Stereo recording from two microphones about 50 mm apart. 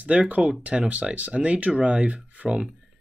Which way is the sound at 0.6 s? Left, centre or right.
Centre.